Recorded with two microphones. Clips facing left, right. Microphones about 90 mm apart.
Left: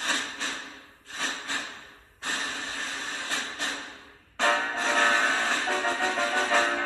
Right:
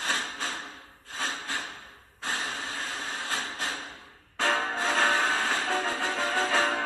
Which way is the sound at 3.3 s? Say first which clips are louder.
Even; 40° right (ahead or behind).